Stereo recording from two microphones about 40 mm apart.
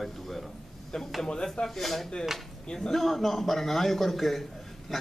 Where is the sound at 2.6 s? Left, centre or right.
Centre.